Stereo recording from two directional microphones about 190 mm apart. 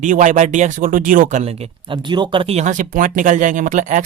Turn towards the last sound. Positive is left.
turn(degrees=-40)  # may be behind; listen again after turning